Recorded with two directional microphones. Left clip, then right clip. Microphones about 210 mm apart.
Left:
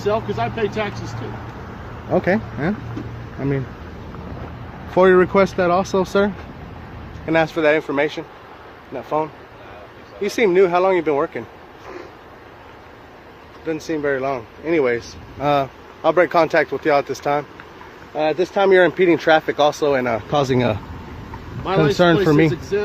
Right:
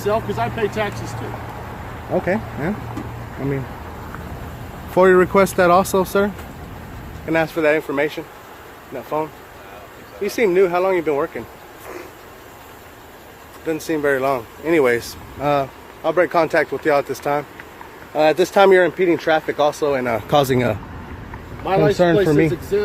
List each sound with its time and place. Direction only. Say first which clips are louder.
0.0 s speech: even; 5° right (ahead or behind)
2.1 s speech: left 2 dB; 15° left (ahead or behind)
4.9 s speech: even; centre (ahead or behind)
13.7 s speech: right 2 dB; 5° right (ahead or behind)
15.4 s speech: left 1 dB; 5° left (ahead or behind)
18.1 s speech: right 4 dB; 15° right (ahead or behind)
18.8 s speech: left 2 dB; 15° left (ahead or behind)
20.1 s speech: right 2 dB; centre (ahead or behind)
21.6 s speech: right 1 dB; 50° left (ahead or behind)
21.9 s speech: even; 5° left (ahead or behind)